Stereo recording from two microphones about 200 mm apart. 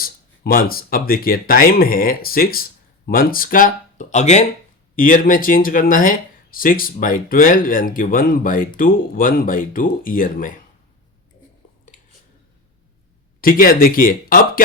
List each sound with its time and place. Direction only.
0.0 s speech: 45° left (ahead or behind)
13.4 s speech: 45° left (ahead or behind)